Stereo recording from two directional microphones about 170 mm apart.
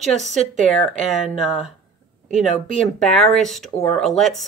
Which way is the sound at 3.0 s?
Centre (ahead or behind).